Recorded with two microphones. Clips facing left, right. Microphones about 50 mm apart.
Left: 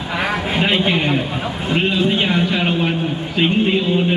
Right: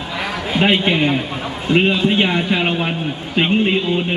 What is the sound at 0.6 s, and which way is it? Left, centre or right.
A man's voice, centre.